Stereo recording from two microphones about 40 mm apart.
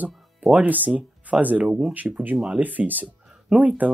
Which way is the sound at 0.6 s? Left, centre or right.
Right.